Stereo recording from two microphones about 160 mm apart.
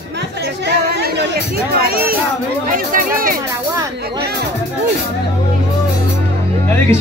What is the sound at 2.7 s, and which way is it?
Speech, 60° right (ahead or behind).